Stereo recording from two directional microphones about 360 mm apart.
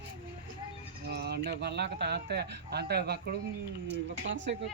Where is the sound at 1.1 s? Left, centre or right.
Right.